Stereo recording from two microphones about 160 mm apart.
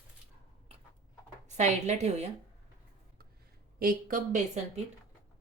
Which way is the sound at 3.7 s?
60° right (ahead or behind).